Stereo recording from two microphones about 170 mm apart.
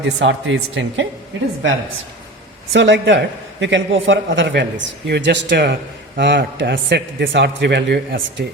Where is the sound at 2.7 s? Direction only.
90° right.